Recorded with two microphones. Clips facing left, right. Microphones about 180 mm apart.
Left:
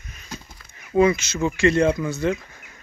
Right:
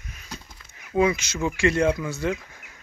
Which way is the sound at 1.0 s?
10° right (ahead or behind).